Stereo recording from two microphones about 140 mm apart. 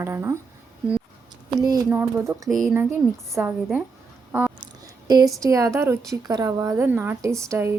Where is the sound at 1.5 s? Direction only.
25° right (ahead or behind).